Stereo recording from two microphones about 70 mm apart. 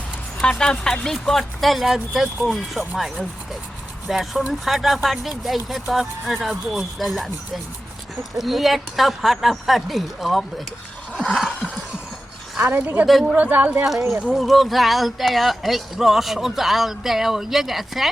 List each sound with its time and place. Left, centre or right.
0.4 s speech: centre
4.1 s speech: centre
11.3 s a sound: centre
12.6 s speech: right
13.1 s speech: centre
13.3 s speech: right
13.8 s speech: centre